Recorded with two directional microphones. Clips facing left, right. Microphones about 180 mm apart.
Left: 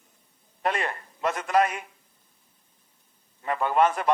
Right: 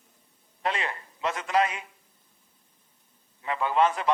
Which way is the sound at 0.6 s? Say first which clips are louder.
Left 3 dB; 50° left (ahead or behind).